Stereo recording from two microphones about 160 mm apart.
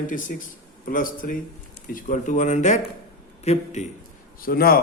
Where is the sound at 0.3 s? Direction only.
65° left (ahead or behind); by 3.8 s 45° left (ahead or behind).